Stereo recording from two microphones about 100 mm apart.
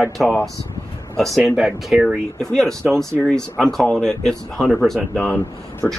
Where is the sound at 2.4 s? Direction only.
5° left (ahead or behind).